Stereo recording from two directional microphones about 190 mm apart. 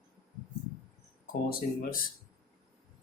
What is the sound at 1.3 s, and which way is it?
Speech, 45° left (ahead or behind).